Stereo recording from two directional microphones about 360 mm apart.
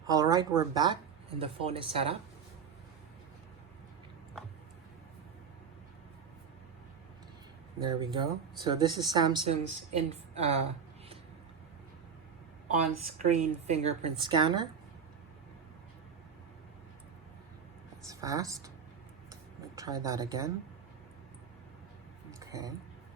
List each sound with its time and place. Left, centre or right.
0.0 s speech: centre
7.8 s speech: centre
13.2 s speech: centre
18.1 s speech: centre
19.7 s speech: centre
22.4 s a sound: centre